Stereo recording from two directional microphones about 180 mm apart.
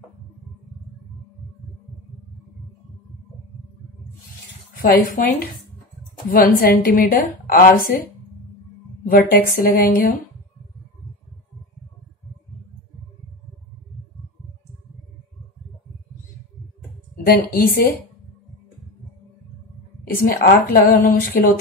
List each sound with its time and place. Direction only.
4.7 s a woman's voice: 55° left (ahead or behind)
9.0 s a woman's voice: 50° left (ahead or behind)
17.2 s a woman's voice: 50° left (ahead or behind)
20.2 s a woman's voice: 55° left (ahead or behind)